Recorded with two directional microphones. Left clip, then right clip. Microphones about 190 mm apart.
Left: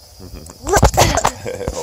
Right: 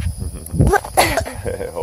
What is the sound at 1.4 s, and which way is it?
Speech, 30° right (ahead or behind).